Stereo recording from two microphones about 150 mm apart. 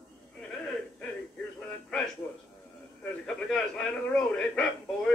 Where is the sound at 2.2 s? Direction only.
20° left (ahead or behind).